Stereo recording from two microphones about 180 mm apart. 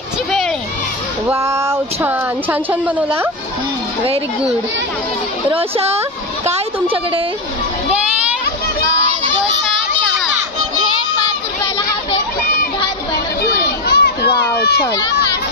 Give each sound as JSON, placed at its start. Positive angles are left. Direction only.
{"t": 1.3, "sound": "speech", "side_deg": -15}
{"t": 5.5, "sound": "a woman's voice", "side_deg": -35}
{"t": 13.4, "sound": "a sound", "side_deg": 60}